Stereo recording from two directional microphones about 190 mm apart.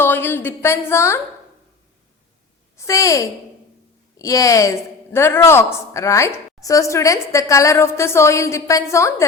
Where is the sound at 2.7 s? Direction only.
15° left (ahead or behind).